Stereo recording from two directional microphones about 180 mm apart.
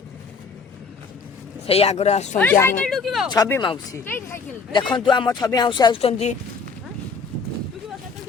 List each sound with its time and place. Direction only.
1.6 s speech: 35° left (ahead or behind)
2.4 s speech: 10° left (ahead or behind)
3.2 s speech: 20° left (ahead or behind); by 6.3 s 35° left (ahead or behind)